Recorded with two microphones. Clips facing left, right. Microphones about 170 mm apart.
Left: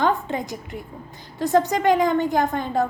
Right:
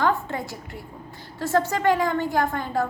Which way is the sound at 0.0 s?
20° left (ahead or behind).